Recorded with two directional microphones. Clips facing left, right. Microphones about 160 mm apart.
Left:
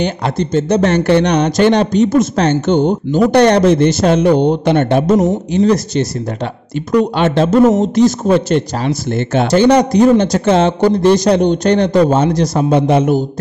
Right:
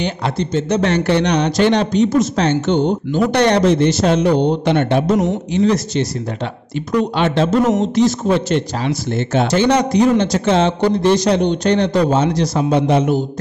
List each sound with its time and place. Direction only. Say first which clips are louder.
0.0 s speech: left 3 dB; 45° left (ahead or behind)
9.5 s speech: left 7 dB; 40° left (ahead or behind)